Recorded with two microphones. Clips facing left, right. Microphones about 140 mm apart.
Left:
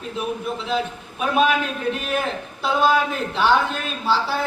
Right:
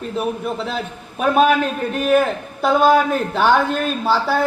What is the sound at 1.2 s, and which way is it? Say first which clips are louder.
A man's voice: right 5 dB; 45° right (ahead or behind).